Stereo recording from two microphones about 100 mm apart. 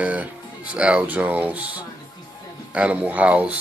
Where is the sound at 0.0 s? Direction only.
15° right (ahead or behind).